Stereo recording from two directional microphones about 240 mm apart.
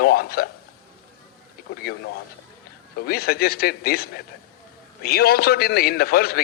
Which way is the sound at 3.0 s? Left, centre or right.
Left.